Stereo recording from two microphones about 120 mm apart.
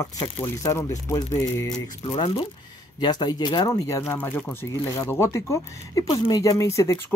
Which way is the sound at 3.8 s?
25° left (ahead or behind).